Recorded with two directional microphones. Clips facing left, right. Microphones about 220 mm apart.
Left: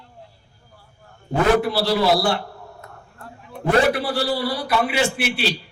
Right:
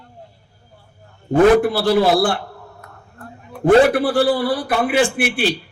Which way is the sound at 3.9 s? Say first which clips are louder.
Right 7 dB; 50° right (ahead or behind).